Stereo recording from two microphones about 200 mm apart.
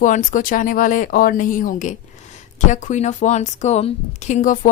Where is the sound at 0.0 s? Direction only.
40° left (ahead or behind).